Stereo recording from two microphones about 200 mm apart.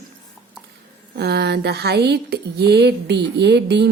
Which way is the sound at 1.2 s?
55° right (ahead or behind).